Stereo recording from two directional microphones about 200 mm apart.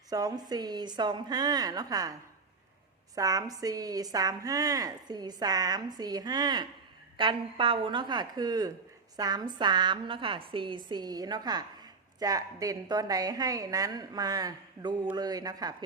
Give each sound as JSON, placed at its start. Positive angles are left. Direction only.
{"t": 0.1, "sound": "a woman's voice", "side_deg": -20}
{"t": 3.2, "sound": "a woman's voice", "side_deg": -15}